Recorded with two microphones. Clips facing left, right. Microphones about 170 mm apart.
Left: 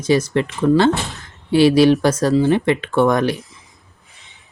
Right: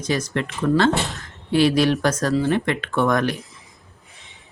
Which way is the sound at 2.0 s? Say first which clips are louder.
Left 5 dB; 30° left (ahead or behind).